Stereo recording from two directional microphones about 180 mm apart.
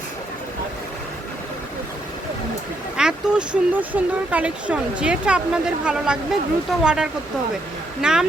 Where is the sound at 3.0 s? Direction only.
5° right (ahead or behind).